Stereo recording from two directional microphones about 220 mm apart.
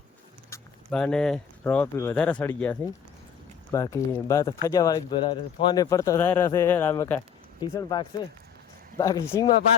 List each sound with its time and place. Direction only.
0.5 s speech: 5° left (ahead or behind)